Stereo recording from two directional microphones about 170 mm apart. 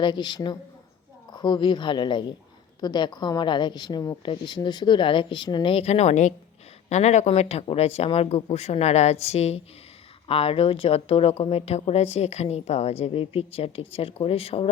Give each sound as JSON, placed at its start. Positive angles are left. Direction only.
{"t": 0.0, "sound": "a woman's voice", "side_deg": 25}